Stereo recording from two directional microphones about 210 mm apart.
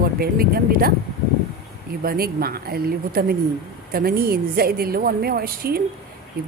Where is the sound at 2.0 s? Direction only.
45° right (ahead or behind).